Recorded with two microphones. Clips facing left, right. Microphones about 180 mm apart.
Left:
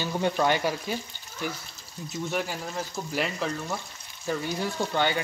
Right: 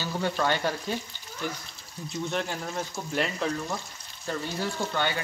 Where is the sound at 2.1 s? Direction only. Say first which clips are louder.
Even; 5° left (ahead or behind).